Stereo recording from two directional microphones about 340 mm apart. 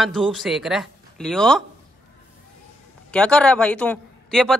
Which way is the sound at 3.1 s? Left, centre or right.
Centre.